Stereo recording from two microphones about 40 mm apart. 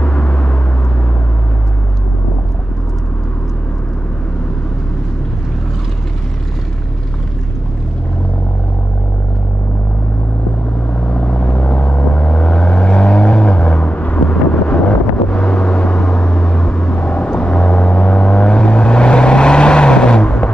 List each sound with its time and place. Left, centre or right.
0.0 s vehicle: left
11.0 s vehicle: left